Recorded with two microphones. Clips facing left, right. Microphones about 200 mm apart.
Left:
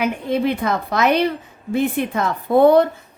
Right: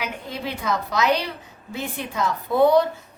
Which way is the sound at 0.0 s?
55° left (ahead or behind).